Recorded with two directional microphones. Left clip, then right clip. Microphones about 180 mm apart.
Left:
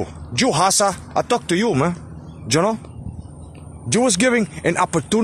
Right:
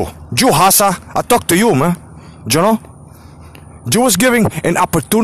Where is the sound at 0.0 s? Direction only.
55° right (ahead or behind).